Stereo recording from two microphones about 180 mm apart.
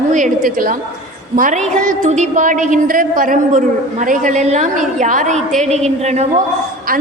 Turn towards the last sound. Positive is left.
turn(degrees=-40)  # may be behind; listen again after turning